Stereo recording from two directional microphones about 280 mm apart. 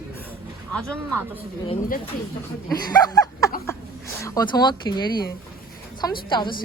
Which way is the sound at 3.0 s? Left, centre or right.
Centre.